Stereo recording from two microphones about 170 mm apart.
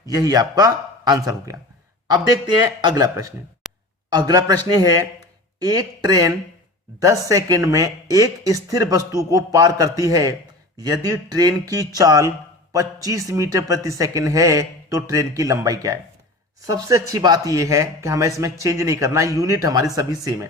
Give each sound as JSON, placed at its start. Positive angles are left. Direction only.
{"t": 0.0, "sound": "speech", "side_deg": -20}
{"t": 3.6, "sound": "a sound", "side_deg": -5}
{"t": 4.1, "sound": "speech", "side_deg": -25}